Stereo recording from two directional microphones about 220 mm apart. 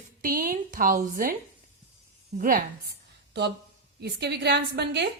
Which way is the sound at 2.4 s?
40° right (ahead or behind).